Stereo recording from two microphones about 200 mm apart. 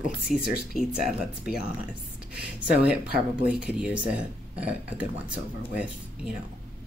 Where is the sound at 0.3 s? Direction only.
Centre (ahead or behind).